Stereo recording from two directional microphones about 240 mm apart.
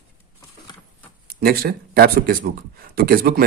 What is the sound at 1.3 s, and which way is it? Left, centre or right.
Speech, right.